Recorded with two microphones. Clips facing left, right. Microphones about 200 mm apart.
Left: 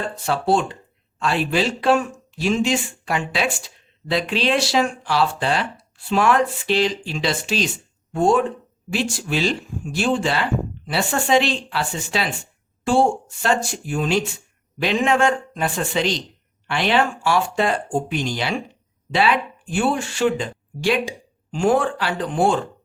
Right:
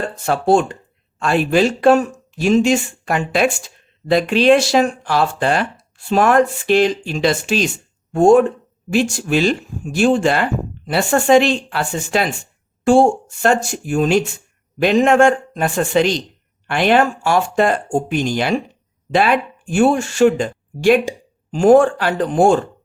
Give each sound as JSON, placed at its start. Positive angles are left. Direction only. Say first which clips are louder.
{"t": 0.3, "sound": "speech", "louder": "right 5 dB", "side_deg": -45}